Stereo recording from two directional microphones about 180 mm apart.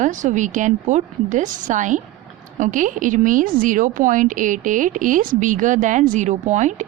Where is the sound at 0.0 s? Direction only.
45° right (ahead or behind).